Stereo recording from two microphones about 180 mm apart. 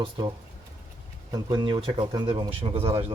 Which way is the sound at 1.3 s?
25° right (ahead or behind).